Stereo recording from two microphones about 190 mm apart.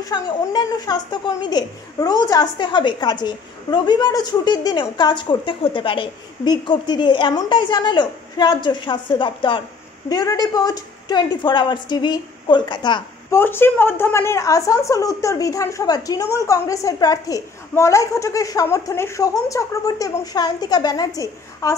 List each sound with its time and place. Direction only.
0.0 s a woman's voice: 20° left (ahead or behind)
13.4 s speech: 10° left (ahead or behind)